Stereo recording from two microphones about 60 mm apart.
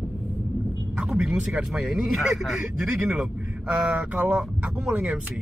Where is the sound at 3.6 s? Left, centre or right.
Right.